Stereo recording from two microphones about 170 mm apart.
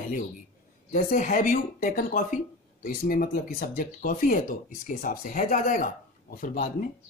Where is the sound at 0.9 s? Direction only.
50° left (ahead or behind).